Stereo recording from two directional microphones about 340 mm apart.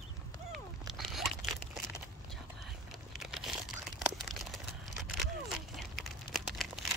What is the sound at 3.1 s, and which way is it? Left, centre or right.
Crumpling, centre.